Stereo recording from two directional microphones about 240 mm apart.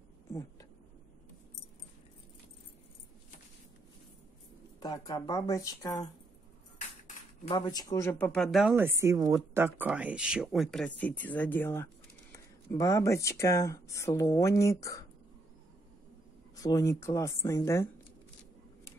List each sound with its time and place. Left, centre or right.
0.3 s a sound: centre
4.7 s speech: centre
7.4 s speech: centre
16.5 s speech: centre